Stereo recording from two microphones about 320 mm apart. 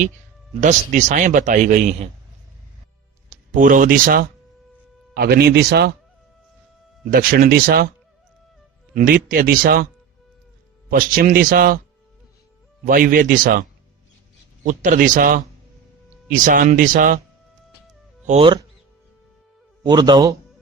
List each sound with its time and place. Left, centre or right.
0.6 s speech: right
3.2 s speech: right
7.1 s speech: right
9.0 s speech: right
10.8 s speech: right
12.8 s speech: right
18.3 s speech: centre
19.8 s speech: centre